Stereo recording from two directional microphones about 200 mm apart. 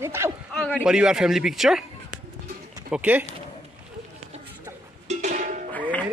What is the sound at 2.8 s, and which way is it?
Speech, 5° right (ahead or behind).